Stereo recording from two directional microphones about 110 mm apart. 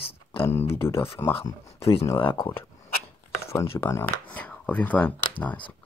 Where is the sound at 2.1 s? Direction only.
50° left (ahead or behind).